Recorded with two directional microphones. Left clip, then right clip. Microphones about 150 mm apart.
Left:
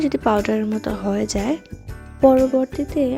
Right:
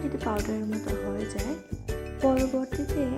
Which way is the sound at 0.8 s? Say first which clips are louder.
Left 8 dB; 45° left (ahead or behind).